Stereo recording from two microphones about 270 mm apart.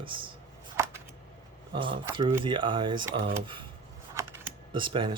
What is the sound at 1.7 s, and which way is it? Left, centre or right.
Speech, centre.